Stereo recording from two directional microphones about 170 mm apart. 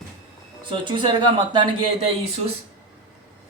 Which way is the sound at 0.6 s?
30° right (ahead or behind).